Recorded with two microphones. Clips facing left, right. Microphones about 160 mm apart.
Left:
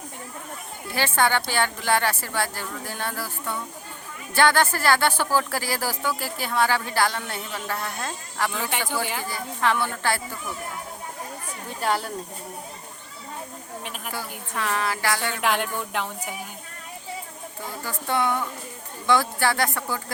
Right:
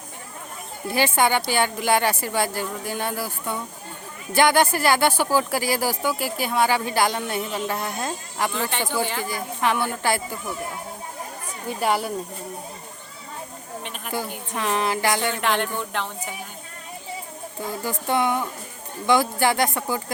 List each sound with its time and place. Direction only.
0.9 s speech: 15° right (ahead or behind)
8.5 s speech: 10° left (ahead or behind)
8.8 s speech: 15° right (ahead or behind)
11.8 s speech: 10° right (ahead or behind)
14.5 s music: 20° right (ahead or behind)
15.4 s speech: 5° left (ahead or behind)
17.8 s speech: 15° right (ahead or behind)